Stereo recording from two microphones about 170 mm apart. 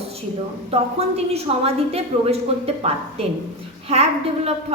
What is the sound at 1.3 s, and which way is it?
A woman's voice, 35° right (ahead or behind).